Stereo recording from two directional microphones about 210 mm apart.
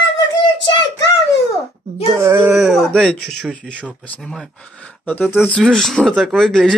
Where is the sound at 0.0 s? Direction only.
20° left (ahead or behind).